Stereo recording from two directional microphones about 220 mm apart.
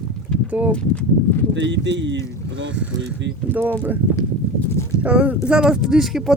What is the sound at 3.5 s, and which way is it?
Speech, 10° right (ahead or behind).